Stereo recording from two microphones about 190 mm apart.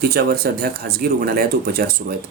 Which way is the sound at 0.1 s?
55° right (ahead or behind).